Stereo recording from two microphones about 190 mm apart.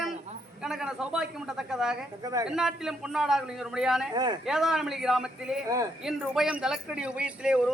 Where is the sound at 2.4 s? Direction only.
5° right (ahead or behind).